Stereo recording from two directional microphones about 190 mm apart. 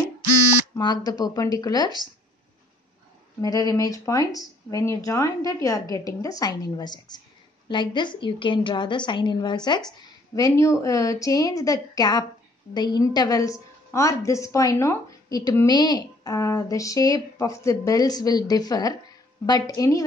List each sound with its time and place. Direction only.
1.0 s a woman's voice: 20° left (ahead or behind)
3.3 s a woman's voice: 20° left (ahead or behind)